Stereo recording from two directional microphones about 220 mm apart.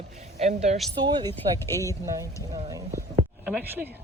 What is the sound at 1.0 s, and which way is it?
Speech, 20° right (ahead or behind).